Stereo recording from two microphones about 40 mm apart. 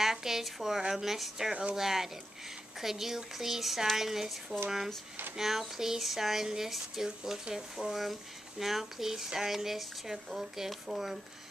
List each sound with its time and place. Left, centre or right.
0.0 s speech: centre
1.5 s speech: right
1.8 s speech: centre